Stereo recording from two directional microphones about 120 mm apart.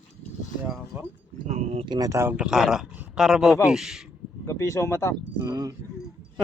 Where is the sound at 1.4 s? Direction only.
70° right (ahead or behind).